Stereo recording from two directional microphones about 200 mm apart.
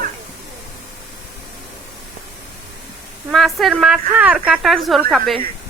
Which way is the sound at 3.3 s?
Centre (ahead or behind).